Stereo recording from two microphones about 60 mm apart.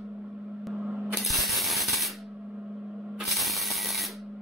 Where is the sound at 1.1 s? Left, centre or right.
Centre.